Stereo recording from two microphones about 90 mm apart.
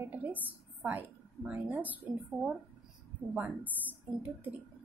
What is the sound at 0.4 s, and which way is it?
A woman's voice, 20° right (ahead or behind).